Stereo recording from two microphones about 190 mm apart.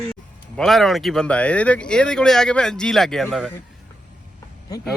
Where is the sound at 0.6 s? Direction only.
Centre (ahead or behind).